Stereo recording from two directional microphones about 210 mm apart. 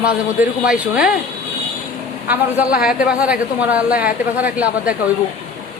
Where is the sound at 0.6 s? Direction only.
5° right (ahead or behind).